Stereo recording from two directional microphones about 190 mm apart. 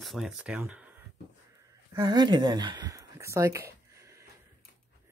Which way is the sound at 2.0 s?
25° right (ahead or behind).